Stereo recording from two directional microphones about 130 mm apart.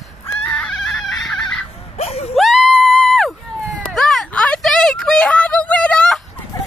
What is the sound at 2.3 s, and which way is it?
Music, centre (ahead or behind).